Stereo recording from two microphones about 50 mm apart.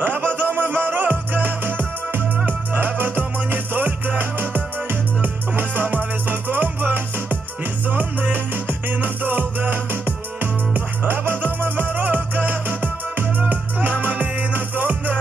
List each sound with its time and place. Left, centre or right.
0.0 s music: right
5.2 s music: right